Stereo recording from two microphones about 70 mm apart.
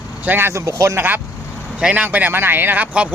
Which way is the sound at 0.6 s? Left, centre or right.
Right.